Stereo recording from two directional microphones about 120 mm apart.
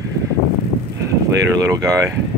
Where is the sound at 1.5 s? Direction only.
30° right (ahead or behind).